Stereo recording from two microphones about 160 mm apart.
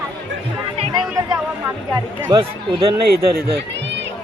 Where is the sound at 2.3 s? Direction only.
25° right (ahead or behind).